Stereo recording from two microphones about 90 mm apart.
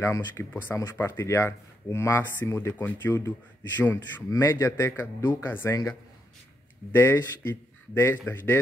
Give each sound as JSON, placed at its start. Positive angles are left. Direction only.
{"t": 0.0, "sound": "a man's voice", "side_deg": 30}
{"t": 4.3, "sound": "speech", "side_deg": 35}
{"t": 6.9, "sound": "a man's voice", "side_deg": 25}